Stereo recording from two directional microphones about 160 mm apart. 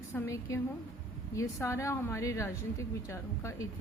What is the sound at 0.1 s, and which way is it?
A woman's voice, 15° left (ahead or behind).